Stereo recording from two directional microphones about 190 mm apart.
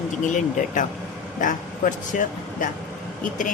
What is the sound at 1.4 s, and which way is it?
Speech, 45° left (ahead or behind).